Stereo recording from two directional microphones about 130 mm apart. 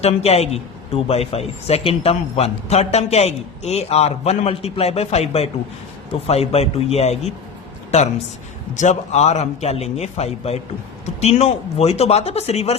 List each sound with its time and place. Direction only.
0.0 s a man's voice: 55° left (ahead or behind)